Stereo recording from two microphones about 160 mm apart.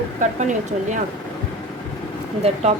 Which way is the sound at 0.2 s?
50° right (ahead or behind).